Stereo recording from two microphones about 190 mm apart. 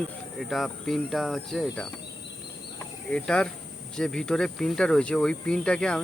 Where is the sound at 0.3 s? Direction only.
Centre (ahead or behind).